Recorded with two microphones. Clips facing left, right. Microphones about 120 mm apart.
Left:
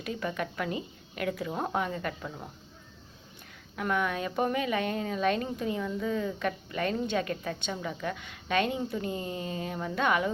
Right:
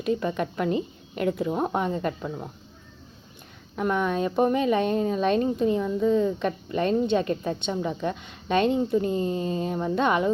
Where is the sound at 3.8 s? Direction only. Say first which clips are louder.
Right 5 dB; 25° right (ahead or behind).